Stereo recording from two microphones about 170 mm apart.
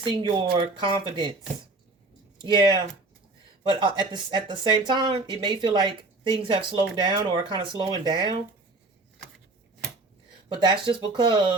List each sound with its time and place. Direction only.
0.0 s speech: 25° right (ahead or behind)
3.7 s speech: 30° right (ahead or behind)
10.5 s speech: 30° right (ahead or behind)